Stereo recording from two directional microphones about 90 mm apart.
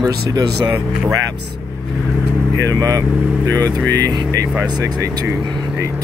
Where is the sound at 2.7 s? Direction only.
40° right (ahead or behind).